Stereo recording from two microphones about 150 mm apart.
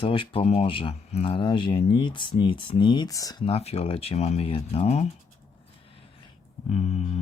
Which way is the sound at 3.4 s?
40° left (ahead or behind).